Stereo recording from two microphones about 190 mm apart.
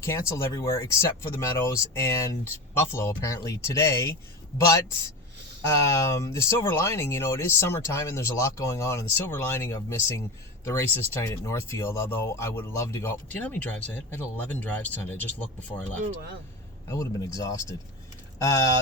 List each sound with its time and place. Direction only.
0.0 s speech: 15° left (ahead or behind)
5.6 s speech: 15° left (ahead or behind)
16.9 s speech: 15° left (ahead or behind)